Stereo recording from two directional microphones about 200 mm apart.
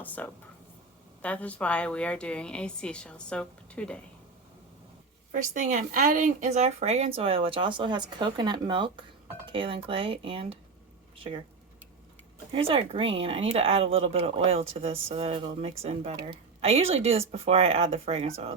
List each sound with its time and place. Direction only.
0.2 s a woman's voice: 10° left (ahead or behind)
5.3 s speech: 40° right (ahead or behind)
12.5 s speech: 25° right (ahead or behind)